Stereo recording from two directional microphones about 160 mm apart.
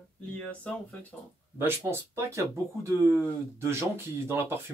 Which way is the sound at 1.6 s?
15° right (ahead or behind).